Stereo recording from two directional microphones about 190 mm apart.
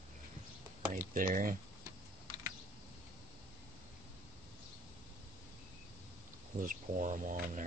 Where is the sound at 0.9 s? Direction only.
45° right (ahead or behind).